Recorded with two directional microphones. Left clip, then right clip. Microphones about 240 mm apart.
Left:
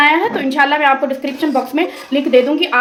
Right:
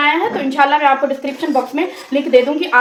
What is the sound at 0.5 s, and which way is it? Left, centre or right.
Speech, left.